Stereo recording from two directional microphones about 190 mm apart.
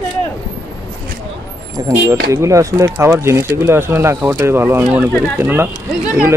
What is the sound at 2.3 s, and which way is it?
Speech, 15° right (ahead or behind).